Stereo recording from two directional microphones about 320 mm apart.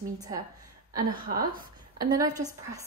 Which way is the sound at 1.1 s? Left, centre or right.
Right.